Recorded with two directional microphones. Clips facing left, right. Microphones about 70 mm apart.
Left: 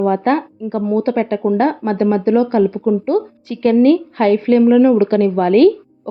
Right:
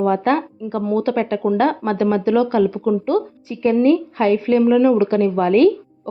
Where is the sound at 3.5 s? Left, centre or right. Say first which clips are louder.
Left 3 dB; left.